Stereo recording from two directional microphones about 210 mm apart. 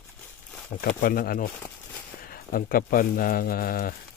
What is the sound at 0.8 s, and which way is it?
Speech, 45° left (ahead or behind).